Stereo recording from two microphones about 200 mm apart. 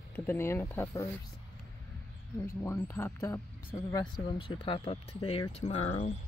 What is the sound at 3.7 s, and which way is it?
Speech, 25° left (ahead or behind).